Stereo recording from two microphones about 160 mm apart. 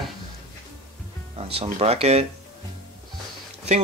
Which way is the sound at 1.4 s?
35° right (ahead or behind).